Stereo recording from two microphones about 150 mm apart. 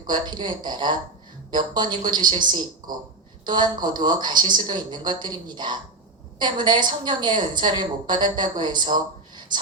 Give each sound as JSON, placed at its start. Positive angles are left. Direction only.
{"t": 0.1, "sound": "a woman's voice", "side_deg": -30}